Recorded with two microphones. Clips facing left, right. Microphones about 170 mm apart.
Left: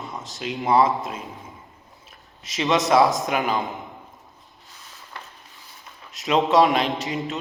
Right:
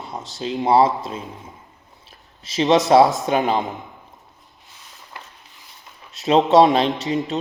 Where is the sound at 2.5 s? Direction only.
35° right (ahead or behind).